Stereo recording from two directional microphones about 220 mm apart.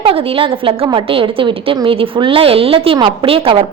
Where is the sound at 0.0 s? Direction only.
25° right (ahead or behind).